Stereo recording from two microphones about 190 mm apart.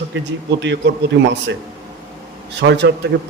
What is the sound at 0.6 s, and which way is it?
Speech, 70° right (ahead or behind).